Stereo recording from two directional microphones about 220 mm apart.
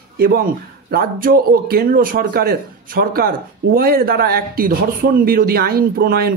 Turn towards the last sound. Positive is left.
turn(degrees=-45)  # may be behind; listen again after turning